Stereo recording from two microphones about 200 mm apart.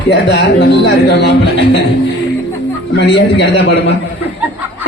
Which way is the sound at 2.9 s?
60° left (ahead or behind).